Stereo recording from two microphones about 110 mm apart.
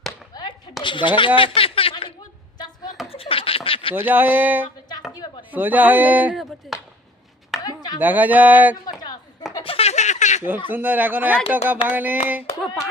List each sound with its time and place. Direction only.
0.8 s a woman's voice: 45° left (ahead or behind)
3.1 s snicker: 60° left (ahead or behind)
3.9 s speech: 15° right (ahead or behind)
6.7 s a sound: centre (ahead or behind)
7.6 s chop: 35° left (ahead or behind)
7.9 s speech: 15° right (ahead or behind)
8.9 s a sound: 40° left (ahead or behind)
9.6 s snicker: 65° left (ahead or behind); by 10.4 s 90° left
10.7 s speech: 15° right (ahead or behind)